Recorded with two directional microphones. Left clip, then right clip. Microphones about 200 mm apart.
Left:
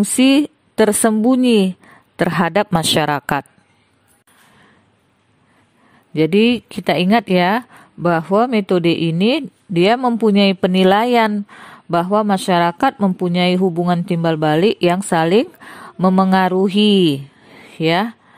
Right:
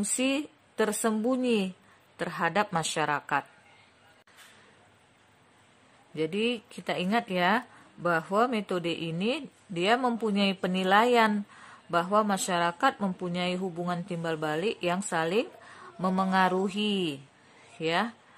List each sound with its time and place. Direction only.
0.0 s a woman's voice: 45° left (ahead or behind)
6.1 s a woman's voice: 45° left (ahead or behind)